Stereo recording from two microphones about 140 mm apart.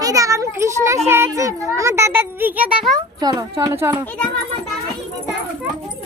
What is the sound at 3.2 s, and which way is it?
Speech, 25° right (ahead or behind).